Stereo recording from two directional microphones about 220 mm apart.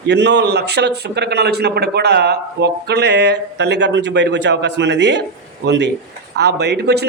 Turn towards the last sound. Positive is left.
turn(degrees=-50)  # may be behind; listen again after turning